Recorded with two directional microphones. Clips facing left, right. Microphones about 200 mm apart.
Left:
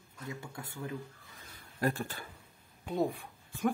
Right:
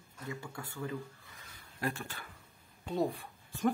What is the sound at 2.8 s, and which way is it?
Speech, 10° left (ahead or behind).